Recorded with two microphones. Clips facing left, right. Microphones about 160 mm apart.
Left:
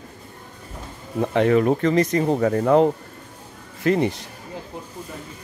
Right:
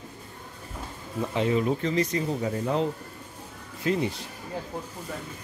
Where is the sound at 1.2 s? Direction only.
65° left (ahead or behind).